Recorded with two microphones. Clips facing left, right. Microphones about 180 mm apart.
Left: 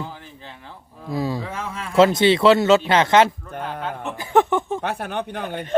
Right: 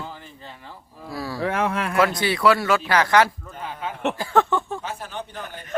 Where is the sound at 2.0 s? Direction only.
25° left (ahead or behind).